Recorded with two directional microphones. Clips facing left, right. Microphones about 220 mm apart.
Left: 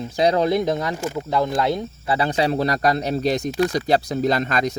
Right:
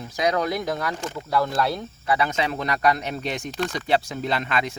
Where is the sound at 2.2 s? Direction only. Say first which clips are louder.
Left 8 dB; 35° left (ahead or behind).